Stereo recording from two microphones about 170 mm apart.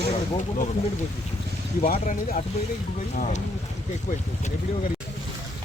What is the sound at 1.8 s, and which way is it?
Speech, 55° left (ahead or behind).